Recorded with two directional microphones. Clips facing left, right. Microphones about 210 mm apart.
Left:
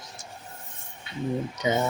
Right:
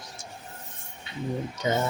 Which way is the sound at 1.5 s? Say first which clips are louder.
Even; 15° left (ahead or behind).